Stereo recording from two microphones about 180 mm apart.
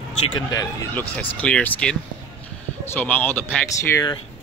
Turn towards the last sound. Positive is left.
turn(degrees=15)  # may be behind; listen again after turning